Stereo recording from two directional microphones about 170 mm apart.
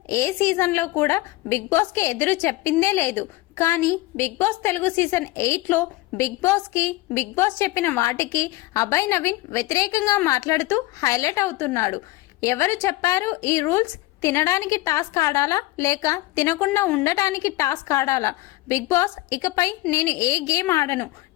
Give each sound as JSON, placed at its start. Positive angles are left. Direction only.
{"t": 0.1, "sound": "a woman's voice", "side_deg": 15}